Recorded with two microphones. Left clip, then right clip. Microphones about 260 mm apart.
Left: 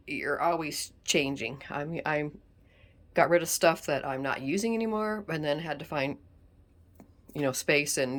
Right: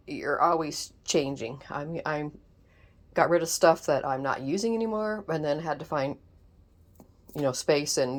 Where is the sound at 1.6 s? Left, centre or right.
Centre.